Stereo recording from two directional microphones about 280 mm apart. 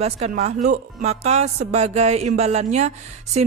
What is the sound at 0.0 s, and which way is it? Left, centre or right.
Speech, right.